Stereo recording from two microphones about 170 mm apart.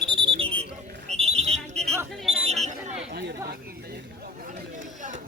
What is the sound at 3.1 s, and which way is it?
Chatter, 70° right (ahead or behind).